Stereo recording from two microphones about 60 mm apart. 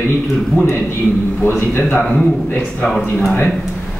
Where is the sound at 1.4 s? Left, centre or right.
Left.